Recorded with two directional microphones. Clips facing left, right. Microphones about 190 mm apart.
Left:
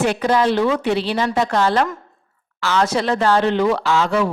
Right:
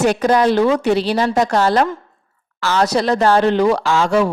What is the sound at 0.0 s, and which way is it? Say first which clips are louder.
A woman's voice: right 3 dB; 40° right (ahead or behind).